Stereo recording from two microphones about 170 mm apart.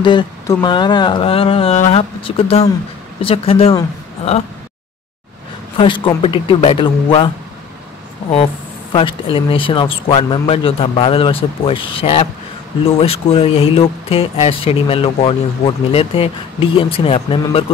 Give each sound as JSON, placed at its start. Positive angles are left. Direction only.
{"t": 0.0, "sound": "speech", "side_deg": 25}
{"t": 5.8, "sound": "speech", "side_deg": 30}
{"t": 8.9, "sound": "speech", "side_deg": 30}